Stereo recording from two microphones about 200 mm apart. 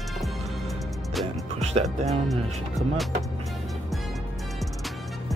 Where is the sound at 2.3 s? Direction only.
Centre (ahead or behind).